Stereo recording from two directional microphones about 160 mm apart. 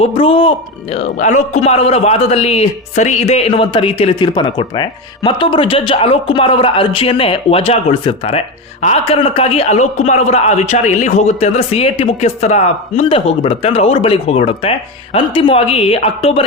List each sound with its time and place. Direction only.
0.0 s a man's voice: 35° left (ahead or behind)
0.9 s a man's voice: 45° left (ahead or behind)